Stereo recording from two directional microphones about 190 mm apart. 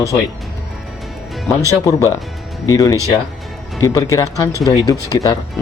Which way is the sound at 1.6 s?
15° left (ahead or behind).